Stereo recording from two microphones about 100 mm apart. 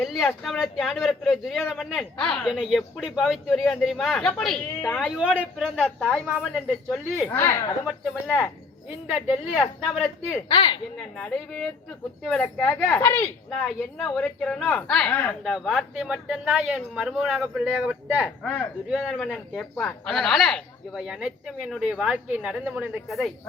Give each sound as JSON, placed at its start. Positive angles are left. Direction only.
{"t": 0.0, "sound": "speech", "side_deg": 0}
{"t": 2.2, "sound": "a woman's voice", "side_deg": 10}
{"t": 2.5, "sound": "speech", "side_deg": -5}
{"t": 5.6, "sound": "speech", "side_deg": 5}
{"t": 7.3, "sound": "speech", "side_deg": 25}
{"t": 9.1, "sound": "speech", "side_deg": -5}
{"t": 10.5, "sound": "a woman's voice", "side_deg": 50}
{"t": 11.2, "sound": "a woman's voice", "side_deg": 10}
{"t": 13.0, "sound": "speech", "side_deg": 20}
{"t": 13.5, "sound": "a woman's voice", "side_deg": 5}
{"t": 15.4, "sound": "speech", "side_deg": 0}
{"t": 17.7, "sound": "speech", "side_deg": -15}
{"t": 18.4, "sound": "a woman's voice", "side_deg": 10}
{"t": 23.0, "sound": "speech", "side_deg": 0}